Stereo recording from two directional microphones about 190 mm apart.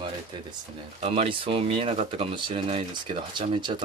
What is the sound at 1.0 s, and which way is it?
Speech, 30° right (ahead or behind).